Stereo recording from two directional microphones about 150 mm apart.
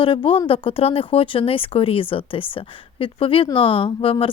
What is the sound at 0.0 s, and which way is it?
A woman's voice, 35° left (ahead or behind).